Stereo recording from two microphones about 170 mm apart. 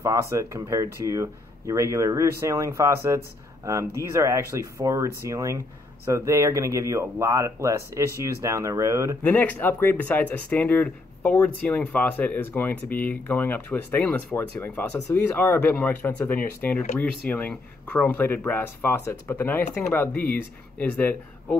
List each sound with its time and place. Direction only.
0.0 s speech: 15° right (ahead or behind)
9.2 s speech: 10° left (ahead or behind)